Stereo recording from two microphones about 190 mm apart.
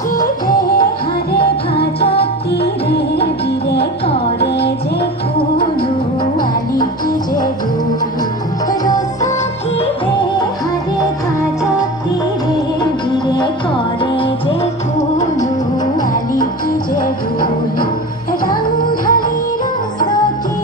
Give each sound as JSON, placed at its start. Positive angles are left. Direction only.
{"t": 0.2, "sound": "music", "side_deg": 50}
{"t": 2.1, "sound": "music", "side_deg": 60}
{"t": 4.4, "sound": "music", "side_deg": 60}
{"t": 8.8, "sound": "music", "side_deg": 20}
{"t": 18.9, "sound": "music", "side_deg": 50}